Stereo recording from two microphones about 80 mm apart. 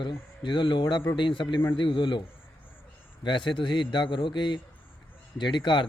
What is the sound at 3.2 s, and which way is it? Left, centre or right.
A man's voice, left.